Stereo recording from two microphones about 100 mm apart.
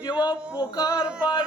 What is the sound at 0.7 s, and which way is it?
Music, 40° left (ahead or behind).